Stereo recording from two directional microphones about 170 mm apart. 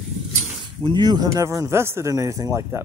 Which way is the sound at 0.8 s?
25° right (ahead or behind).